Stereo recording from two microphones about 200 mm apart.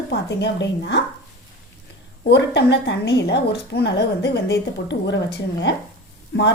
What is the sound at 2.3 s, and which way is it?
A woman's voice, 60° left (ahead or behind).